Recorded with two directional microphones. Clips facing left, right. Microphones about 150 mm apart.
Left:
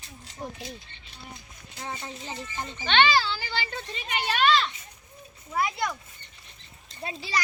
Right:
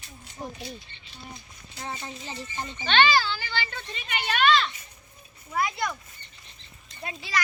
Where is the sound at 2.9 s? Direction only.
20° left (ahead or behind).